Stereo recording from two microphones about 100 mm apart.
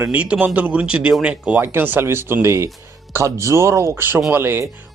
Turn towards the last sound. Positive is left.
turn(degrees=-25)  # may be behind; listen again after turning